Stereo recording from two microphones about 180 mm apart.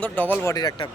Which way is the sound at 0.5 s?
20° left (ahead or behind).